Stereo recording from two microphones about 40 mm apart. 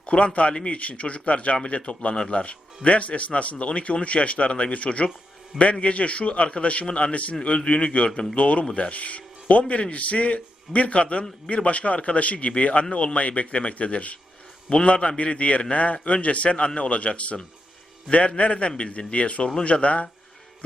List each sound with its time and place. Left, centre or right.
0.0 s a man's voice: left